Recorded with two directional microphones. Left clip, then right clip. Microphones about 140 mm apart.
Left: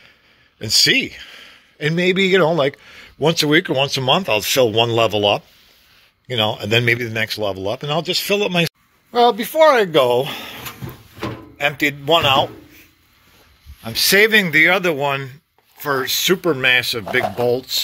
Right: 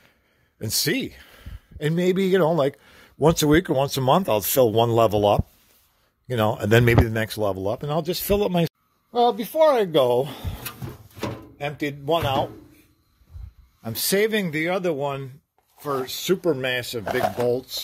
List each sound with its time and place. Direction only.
0.6 s speech: 40° right (ahead or behind)
3.2 s a man's voice: 60° right (ahead or behind); by 8.7 s 35° right (ahead or behind)
9.1 s speech: 10° right (ahead or behind)
10.0 s speech: 30° right (ahead or behind)
11.5 s speech: 10° right (ahead or behind)
14.0 s speech: 20° right (ahead or behind)